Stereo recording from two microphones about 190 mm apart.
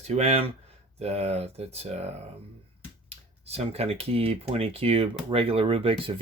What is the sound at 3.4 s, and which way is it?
Speech, 35° right (ahead or behind).